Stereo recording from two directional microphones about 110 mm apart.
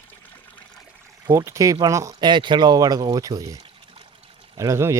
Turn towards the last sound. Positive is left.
turn(degrees=-25)  # may be behind; listen again after turning